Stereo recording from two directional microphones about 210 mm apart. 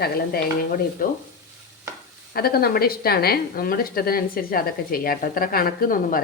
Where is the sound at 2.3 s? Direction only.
45° left (ahead or behind).